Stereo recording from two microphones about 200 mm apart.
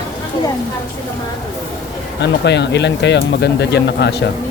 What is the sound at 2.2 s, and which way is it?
Speech, 60° left (ahead or behind).